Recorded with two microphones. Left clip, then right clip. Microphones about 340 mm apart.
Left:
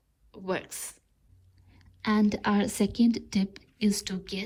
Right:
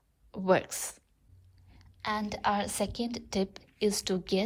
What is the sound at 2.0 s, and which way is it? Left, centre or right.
Speech, centre.